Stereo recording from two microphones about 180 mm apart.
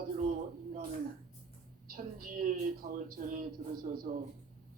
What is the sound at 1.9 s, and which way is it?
Speech, 50° right (ahead or behind).